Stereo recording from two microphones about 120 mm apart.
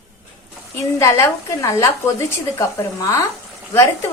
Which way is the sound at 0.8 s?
25° left (ahead or behind).